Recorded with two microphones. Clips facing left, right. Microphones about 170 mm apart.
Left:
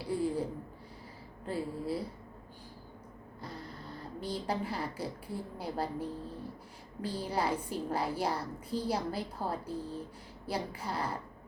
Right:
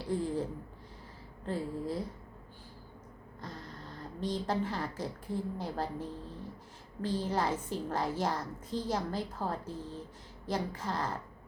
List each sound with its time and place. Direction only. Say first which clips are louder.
0.0 s speech: left 1 dB; 10° left (ahead or behind)
1.5 s a woman's voice: even; 10° left (ahead or behind)
4.2 s a woman's voice: right 2 dB; 10° left (ahead or behind)